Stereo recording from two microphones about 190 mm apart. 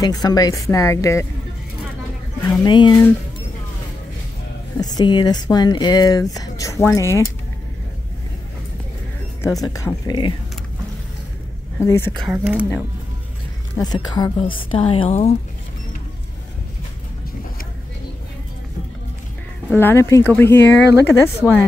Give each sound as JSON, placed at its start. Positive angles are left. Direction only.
{"t": 0.0, "sound": "speech", "side_deg": 20}
{"t": 2.4, "sound": "speech", "side_deg": 15}
{"t": 4.7, "sound": "speech", "side_deg": 20}
{"t": 9.4, "sound": "speech", "side_deg": 20}
{"t": 11.8, "sound": "speech", "side_deg": 15}
{"t": 12.2, "sound": "speech", "side_deg": -5}
{"t": 13.7, "sound": "speech", "side_deg": 20}
{"t": 19.7, "sound": "speech", "side_deg": 10}